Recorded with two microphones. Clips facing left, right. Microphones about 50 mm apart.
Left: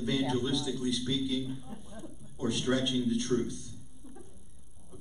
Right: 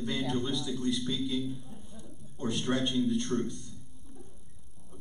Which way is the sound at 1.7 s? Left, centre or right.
Left.